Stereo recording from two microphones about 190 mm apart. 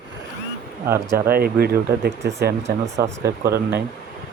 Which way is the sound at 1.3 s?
55° right (ahead or behind).